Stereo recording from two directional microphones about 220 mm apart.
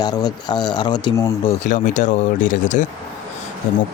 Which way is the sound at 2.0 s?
35° left (ahead or behind).